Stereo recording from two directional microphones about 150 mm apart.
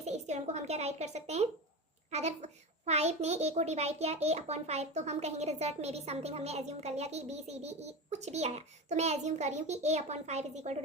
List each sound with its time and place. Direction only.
0.0 s a woman's voice: 50° right (ahead or behind)